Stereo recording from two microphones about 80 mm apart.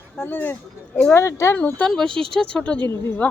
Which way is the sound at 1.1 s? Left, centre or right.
Left.